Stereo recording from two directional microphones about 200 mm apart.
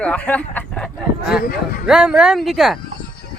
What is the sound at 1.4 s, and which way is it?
Speech, 50° left (ahead or behind).